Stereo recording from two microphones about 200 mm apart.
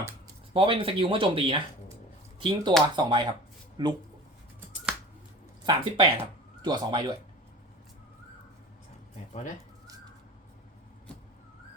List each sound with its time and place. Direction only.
0.5 s speech: 25° right (ahead or behind)
5.6 s speech: 25° right (ahead or behind)
9.3 s speech: 35° left (ahead or behind)